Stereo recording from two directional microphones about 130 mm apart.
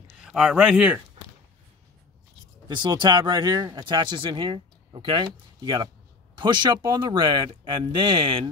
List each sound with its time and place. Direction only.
0.1 s speech: 5° right (ahead or behind)
2.7 s speech: 35° right (ahead or behind)